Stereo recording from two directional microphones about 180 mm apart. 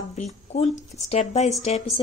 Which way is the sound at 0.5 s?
40° left (ahead or behind).